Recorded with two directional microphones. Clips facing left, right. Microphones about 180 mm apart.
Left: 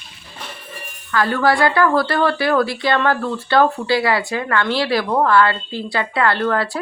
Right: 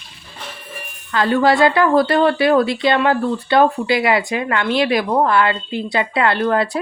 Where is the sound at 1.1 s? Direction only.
20° right (ahead or behind).